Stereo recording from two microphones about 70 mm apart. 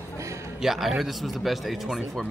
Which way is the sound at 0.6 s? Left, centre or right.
Centre.